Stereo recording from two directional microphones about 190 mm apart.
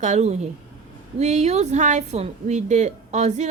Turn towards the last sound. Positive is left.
turn(degrees=-40)  # may be behind; listen again after turning